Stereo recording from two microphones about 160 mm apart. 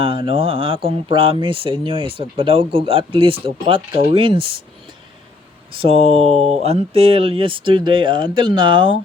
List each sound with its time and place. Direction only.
0.0 s speech: 35° right (ahead or behind)
5.7 s speech: 35° right (ahead or behind)